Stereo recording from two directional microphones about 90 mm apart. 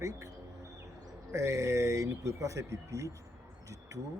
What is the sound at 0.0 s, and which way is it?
Speech, 35° right (ahead or behind).